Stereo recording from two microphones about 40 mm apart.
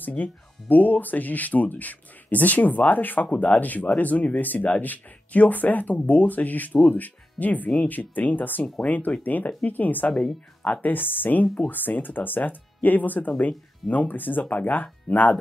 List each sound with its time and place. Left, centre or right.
0.1 s speech: left
10.9 s speech: left
14.4 s speech: left